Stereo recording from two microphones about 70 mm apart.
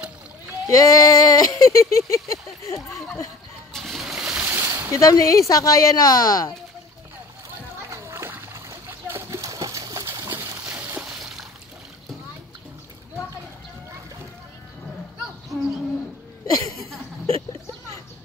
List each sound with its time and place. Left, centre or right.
0.7 s a woman's voice: left
3.7 s splash: centre
4.4 s a sound: right
4.9 s a woman's voice: left
7.9 s splash: right
9.4 s a sound: right
10.6 s a sound: right
11.1 s splash: centre
16.4 s speech: left